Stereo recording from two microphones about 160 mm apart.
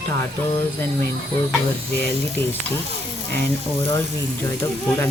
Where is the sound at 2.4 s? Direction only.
15° left (ahead or behind).